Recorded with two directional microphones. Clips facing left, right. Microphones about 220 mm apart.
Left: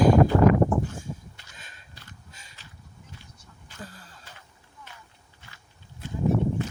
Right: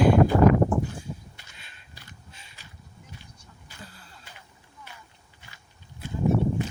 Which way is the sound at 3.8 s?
40° left (ahead or behind).